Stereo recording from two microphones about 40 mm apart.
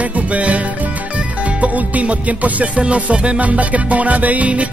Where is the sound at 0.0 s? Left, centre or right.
Right.